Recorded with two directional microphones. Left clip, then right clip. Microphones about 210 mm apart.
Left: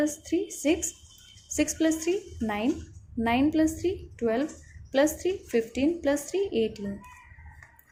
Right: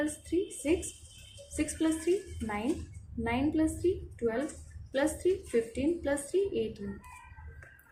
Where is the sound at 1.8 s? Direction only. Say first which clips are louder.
Left 4 dB; 45° left (ahead or behind).